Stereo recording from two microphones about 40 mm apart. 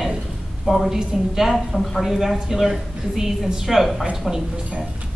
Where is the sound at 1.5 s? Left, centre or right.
Centre.